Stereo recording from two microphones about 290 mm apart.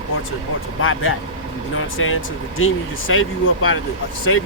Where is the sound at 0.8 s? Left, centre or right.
Left.